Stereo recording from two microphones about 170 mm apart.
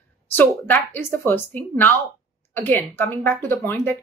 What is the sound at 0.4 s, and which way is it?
A woman's voice, 10° left (ahead or behind).